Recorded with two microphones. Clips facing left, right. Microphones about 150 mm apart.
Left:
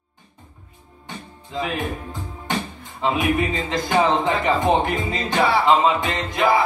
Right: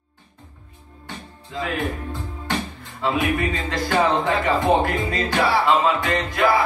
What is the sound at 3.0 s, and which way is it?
Music, 20° left (ahead or behind).